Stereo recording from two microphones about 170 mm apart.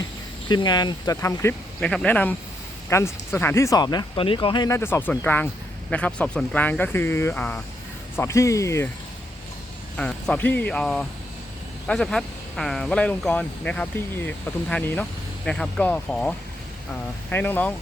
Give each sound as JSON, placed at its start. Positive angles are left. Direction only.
{"t": 0.4, "sound": "speech", "side_deg": 25}
{"t": 10.0, "sound": "speech", "side_deg": 5}